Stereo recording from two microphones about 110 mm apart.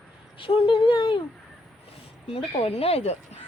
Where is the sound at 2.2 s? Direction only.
65° left (ahead or behind).